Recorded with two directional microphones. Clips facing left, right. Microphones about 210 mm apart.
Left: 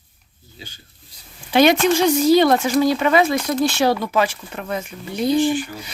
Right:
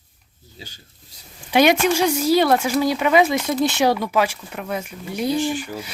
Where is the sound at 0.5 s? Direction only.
40° right (ahead or behind).